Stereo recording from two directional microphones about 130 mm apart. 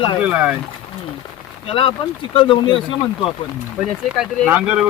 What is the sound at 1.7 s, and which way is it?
Speech, 45° left (ahead or behind).